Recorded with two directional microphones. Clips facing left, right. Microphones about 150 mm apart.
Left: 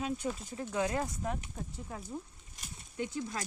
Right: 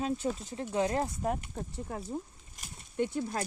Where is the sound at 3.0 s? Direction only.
60° right (ahead or behind).